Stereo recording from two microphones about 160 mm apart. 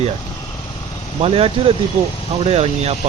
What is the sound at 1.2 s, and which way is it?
Speech, 35° right (ahead or behind).